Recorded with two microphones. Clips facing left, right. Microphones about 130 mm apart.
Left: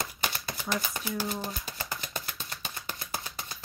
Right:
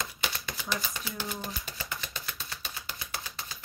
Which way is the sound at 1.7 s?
45° left (ahead or behind).